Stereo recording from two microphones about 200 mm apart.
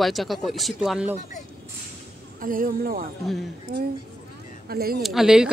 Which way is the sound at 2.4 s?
45° right (ahead or behind).